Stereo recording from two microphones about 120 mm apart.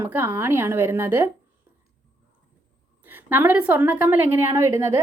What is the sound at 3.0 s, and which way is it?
A woman's voice, 15° right (ahead or behind).